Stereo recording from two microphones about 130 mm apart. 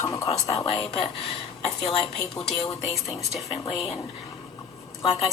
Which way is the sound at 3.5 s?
45° left (ahead or behind).